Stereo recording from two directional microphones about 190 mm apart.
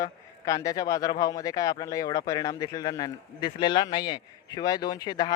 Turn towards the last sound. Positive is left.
turn(degrees=20)  # may be behind; listen again after turning